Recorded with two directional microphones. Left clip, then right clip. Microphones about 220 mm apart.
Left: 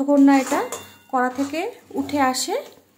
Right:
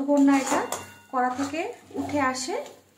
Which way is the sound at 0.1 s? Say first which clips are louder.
Left 5 dB; 55° left (ahead or behind).